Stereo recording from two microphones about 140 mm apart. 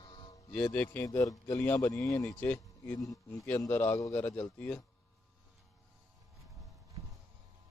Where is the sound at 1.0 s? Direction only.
25° left (ahead or behind).